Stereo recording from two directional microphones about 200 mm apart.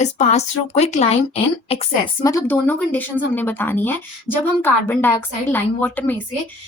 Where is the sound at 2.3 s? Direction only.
15° left (ahead or behind).